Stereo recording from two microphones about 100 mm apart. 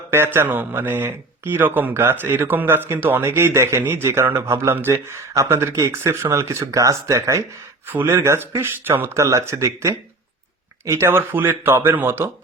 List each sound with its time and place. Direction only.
0.1 s a man's voice: 25° right (ahead or behind)